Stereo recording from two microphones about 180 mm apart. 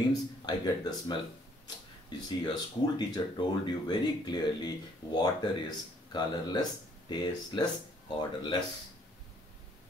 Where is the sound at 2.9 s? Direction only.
25° left (ahead or behind).